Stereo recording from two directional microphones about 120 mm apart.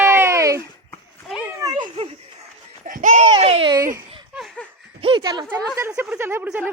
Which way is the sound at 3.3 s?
55° right (ahead or behind).